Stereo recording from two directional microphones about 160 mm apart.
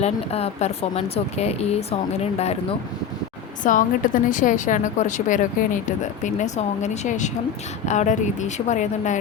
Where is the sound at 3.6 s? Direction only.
55° left (ahead or behind).